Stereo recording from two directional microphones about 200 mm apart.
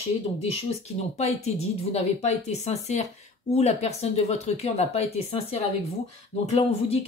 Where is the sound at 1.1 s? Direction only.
35° left (ahead or behind).